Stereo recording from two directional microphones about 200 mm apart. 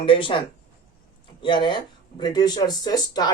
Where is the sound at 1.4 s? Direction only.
25° left (ahead or behind).